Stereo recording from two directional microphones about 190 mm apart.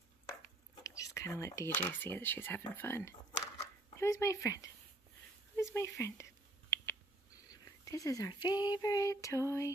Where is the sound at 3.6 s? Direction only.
15° left (ahead or behind).